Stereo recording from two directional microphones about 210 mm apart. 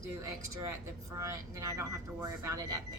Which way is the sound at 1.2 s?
15° right (ahead or behind).